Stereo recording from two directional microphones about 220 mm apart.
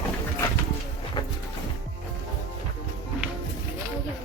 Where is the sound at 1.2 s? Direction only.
20° left (ahead or behind).